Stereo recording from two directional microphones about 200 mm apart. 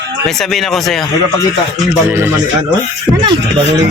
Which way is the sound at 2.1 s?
10° right (ahead or behind).